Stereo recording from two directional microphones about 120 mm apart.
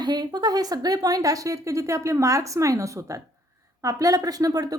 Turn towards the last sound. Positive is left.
turn(degrees=-30)  # may be behind; listen again after turning